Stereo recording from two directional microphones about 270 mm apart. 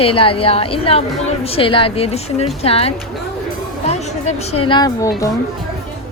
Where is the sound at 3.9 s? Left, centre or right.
Left.